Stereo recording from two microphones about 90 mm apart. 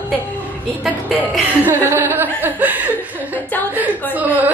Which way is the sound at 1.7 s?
25° right (ahead or behind).